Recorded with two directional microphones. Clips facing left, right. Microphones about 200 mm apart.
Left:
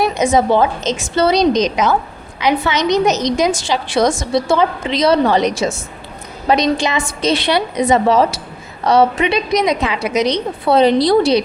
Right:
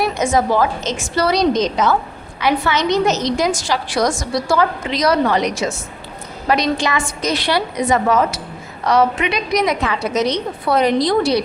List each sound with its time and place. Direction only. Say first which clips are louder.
0.0 s a woman's voice: left 3 dB; 20° left (ahead or behind)
10.7 s a woman's voice: left 4 dB; 30° left (ahead or behind)